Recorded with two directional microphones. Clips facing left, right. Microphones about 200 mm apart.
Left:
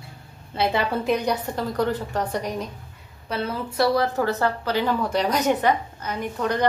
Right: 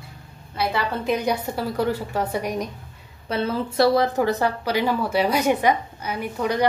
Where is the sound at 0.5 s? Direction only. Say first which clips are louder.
Left 2 dB; 25° left (ahead or behind).